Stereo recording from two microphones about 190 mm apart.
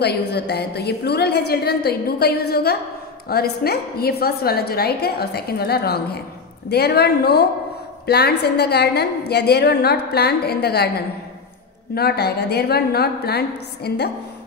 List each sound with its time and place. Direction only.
0.0 s a woman's voice: 60° left (ahead or behind)